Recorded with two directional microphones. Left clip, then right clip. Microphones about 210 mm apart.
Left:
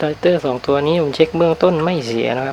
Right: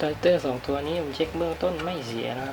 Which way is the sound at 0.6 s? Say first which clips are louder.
Left 12 dB; 35° left (ahead or behind).